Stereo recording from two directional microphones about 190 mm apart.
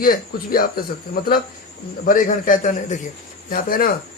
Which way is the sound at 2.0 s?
45° left (ahead or behind).